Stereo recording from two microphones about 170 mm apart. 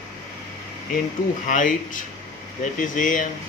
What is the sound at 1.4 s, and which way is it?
Speech, 50° left (ahead or behind).